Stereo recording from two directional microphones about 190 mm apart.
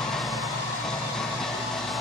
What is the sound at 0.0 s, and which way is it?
Vehicle, centre (ahead or behind).